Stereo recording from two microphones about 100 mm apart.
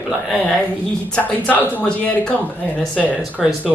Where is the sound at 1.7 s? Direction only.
10° left (ahead or behind).